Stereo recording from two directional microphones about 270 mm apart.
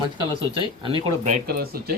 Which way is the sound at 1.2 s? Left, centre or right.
Right.